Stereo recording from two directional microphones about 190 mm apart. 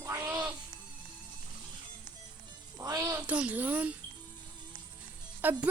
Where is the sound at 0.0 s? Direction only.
15° right (ahead or behind).